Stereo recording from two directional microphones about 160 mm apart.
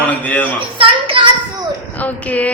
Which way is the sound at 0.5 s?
35° right (ahead or behind).